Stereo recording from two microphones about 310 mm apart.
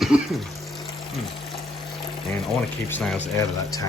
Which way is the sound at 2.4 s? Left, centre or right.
Centre.